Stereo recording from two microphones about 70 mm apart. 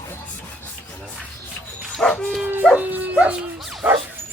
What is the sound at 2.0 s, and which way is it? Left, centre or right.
Speech, centre.